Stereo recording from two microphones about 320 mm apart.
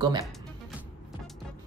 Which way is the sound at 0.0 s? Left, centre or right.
Centre.